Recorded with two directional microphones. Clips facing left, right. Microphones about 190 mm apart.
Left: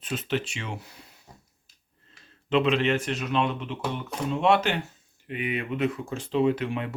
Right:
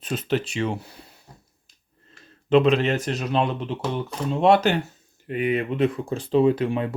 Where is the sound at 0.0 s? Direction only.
40° right (ahead or behind).